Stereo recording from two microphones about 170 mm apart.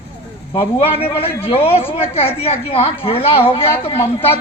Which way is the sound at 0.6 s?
35° left (ahead or behind).